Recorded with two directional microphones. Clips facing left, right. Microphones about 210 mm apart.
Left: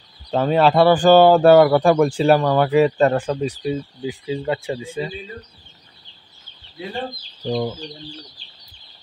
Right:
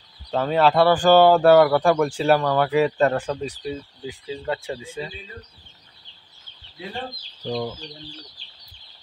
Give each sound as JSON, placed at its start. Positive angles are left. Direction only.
{"t": 0.3, "sound": "speech", "side_deg": 20}
{"t": 7.4, "sound": "speech", "side_deg": 25}